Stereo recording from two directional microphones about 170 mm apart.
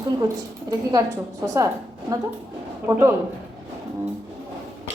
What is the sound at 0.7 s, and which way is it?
A woman's voice, 20° right (ahead or behind).